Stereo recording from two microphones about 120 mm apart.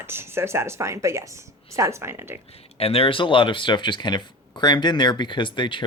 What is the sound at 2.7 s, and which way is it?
Speech, 55° left (ahead or behind).